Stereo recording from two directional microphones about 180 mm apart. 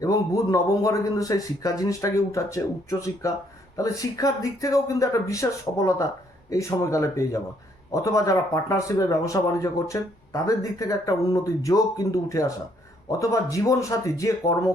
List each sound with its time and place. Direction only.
0.0 s a man's voice: 20° left (ahead or behind)